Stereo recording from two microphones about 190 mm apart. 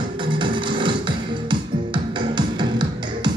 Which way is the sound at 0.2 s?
25° right (ahead or behind).